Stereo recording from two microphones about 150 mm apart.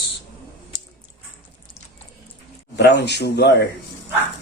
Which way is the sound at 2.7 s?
90° left.